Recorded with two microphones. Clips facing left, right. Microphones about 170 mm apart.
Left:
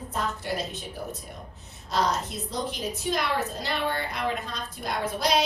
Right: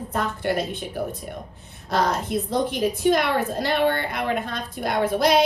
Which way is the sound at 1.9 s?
60° right (ahead or behind).